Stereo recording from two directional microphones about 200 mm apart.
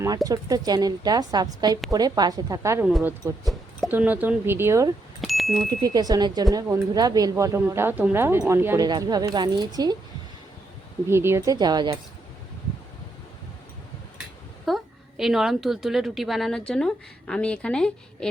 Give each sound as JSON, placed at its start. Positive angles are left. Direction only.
{"t": 0.0, "sound": "a woman's voice", "side_deg": -20}
{"t": 2.8, "sound": "speech", "side_deg": -5}
{"t": 5.2, "sound": "a sound", "side_deg": 0}
{"t": 5.8, "sound": "a woman's voice", "side_deg": -20}
{"t": 11.1, "sound": "a woman's voice", "side_deg": -10}
{"t": 14.7, "sound": "a sound", "side_deg": 0}
{"t": 15.2, "sound": "a woman's voice", "side_deg": 0}